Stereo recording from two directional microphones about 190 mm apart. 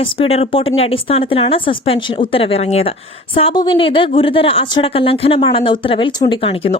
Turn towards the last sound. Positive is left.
turn(degrees=30)  # may be behind; listen again after turning